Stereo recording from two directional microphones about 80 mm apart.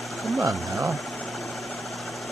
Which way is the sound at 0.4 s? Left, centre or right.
Right.